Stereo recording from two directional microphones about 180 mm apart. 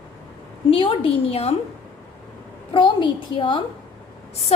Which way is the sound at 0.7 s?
30° left (ahead or behind).